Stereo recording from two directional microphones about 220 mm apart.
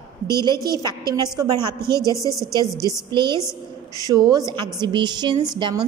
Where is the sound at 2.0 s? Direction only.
15° left (ahead or behind).